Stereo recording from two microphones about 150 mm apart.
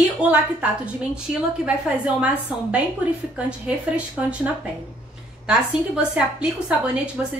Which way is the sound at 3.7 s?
10° right (ahead or behind).